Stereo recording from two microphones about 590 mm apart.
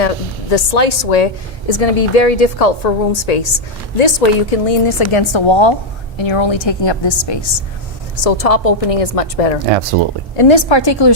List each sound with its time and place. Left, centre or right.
0.5 s a woman's voice: left
8.2 s a woman's voice: left
10.3 s a woman's voice: left